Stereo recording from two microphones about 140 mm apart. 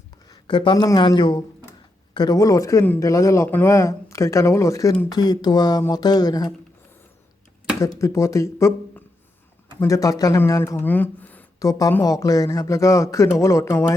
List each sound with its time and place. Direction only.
0.3 s a sound: 35° left (ahead or behind)
0.9 s speech: 35° left (ahead or behind)
7.8 s speech: 20° left (ahead or behind)
9.8 s speech: 25° left (ahead or behind)
11.6 s speech: 25° left (ahead or behind)